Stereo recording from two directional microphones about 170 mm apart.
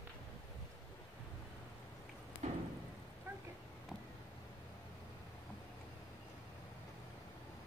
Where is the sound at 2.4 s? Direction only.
40° right (ahead or behind).